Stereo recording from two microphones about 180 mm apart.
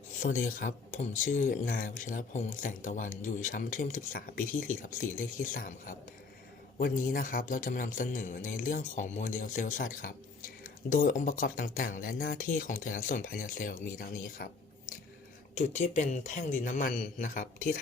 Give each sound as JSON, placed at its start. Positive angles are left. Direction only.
{"t": 0.2, "sound": "speech", "side_deg": 45}
{"t": 15.5, "sound": "speech", "side_deg": 40}